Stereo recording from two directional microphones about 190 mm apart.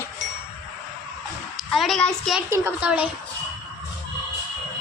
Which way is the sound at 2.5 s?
10° right (ahead or behind).